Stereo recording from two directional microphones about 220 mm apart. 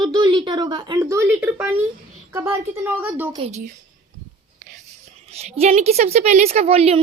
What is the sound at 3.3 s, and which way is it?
Speech, 30° right (ahead or behind).